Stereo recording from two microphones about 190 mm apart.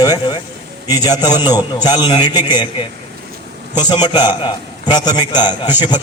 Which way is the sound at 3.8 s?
25° left (ahead or behind).